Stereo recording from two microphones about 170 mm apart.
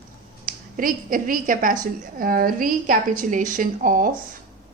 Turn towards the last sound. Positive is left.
turn(degrees=-55)  # may be behind; listen again after turning